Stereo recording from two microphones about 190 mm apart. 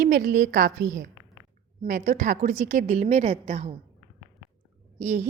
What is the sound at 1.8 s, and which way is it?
A woman's voice, 40° right (ahead or behind).